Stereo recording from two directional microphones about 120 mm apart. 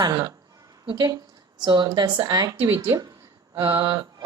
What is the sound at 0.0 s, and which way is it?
A woman's voice, 30° right (ahead or behind).